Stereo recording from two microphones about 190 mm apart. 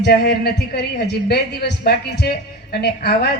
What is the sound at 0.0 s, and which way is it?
Speech, 55° left (ahead or behind).